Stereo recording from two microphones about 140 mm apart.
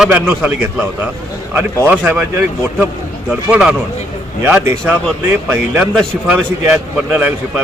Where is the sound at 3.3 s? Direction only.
5° right (ahead or behind).